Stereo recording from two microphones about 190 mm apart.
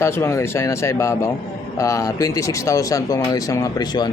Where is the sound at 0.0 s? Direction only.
15° left (ahead or behind).